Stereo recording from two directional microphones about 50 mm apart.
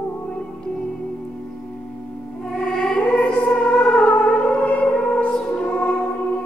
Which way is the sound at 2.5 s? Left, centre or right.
Centre.